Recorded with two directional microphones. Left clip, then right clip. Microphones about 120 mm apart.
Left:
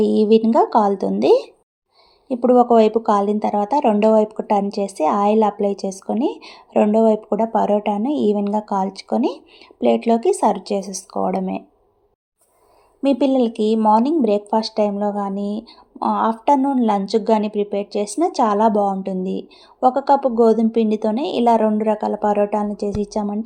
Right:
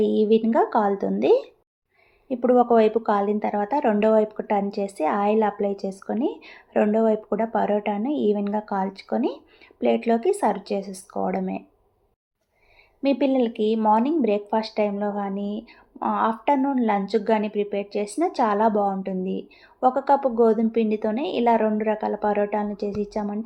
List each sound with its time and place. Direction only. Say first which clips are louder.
0.0 s speech: left 5 dB; 30° left (ahead or behind)
13.0 s speech: left 4 dB; 35° left (ahead or behind)